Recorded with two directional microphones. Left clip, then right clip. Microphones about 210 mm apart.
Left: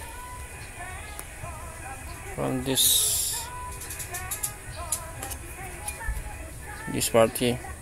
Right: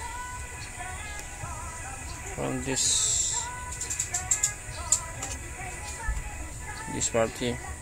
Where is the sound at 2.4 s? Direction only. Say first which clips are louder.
Left 4 dB; 30° left (ahead or behind).